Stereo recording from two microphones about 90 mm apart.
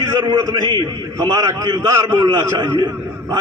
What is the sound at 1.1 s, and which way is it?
A man's voice, 40° right (ahead or behind).